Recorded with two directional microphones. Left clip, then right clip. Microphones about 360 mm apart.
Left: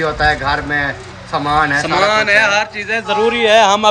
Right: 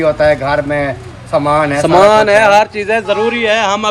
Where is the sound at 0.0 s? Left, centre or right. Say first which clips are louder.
Right 4 dB; centre.